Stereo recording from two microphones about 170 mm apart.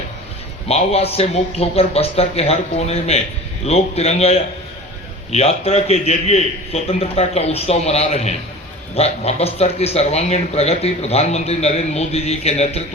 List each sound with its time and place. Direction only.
0.7 s speech: 35° left (ahead or behind)